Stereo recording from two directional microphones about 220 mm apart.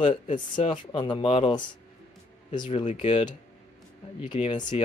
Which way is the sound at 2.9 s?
35° left (ahead or behind).